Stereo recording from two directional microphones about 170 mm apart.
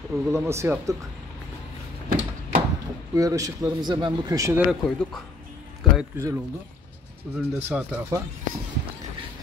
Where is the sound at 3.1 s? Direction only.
20° right (ahead or behind).